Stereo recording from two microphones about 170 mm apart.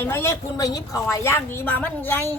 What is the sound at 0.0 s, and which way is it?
A woman's voice, 15° left (ahead or behind).